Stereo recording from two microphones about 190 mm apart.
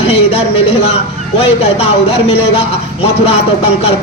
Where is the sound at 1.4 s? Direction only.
30° left (ahead or behind).